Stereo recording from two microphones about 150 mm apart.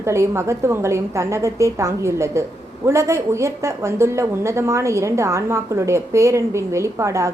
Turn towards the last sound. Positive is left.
turn(degrees=-20)  # may be behind; listen again after turning